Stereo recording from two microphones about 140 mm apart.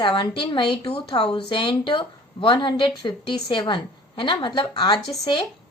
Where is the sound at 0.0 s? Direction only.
35° left (ahead or behind).